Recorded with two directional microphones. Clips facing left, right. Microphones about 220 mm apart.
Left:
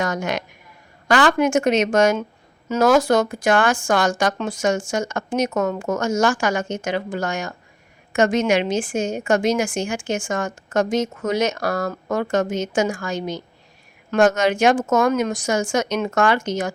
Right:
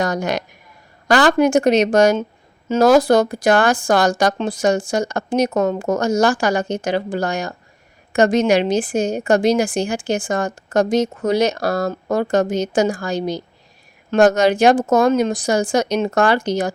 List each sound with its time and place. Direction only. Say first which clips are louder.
0.0 s a woman's voice: right 3 dB; 35° right (ahead or behind)